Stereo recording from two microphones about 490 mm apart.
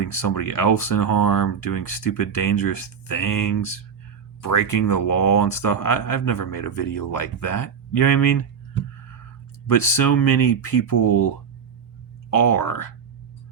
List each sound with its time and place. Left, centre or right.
0.1 s speech: left
9.7 s speech: left
12.3 s speech: left